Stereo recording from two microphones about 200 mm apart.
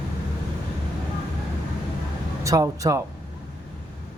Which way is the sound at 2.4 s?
15° right (ahead or behind).